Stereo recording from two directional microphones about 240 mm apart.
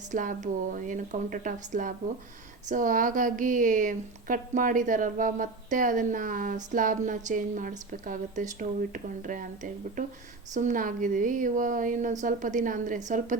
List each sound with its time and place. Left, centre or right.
0.1 s a woman's voice: right